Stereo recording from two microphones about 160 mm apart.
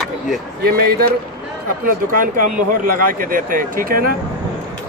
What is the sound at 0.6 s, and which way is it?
Speech, 70° right (ahead or behind).